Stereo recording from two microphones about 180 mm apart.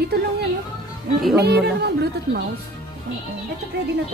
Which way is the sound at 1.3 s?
65° right (ahead or behind).